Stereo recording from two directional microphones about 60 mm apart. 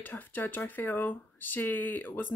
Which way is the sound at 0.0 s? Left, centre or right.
Left.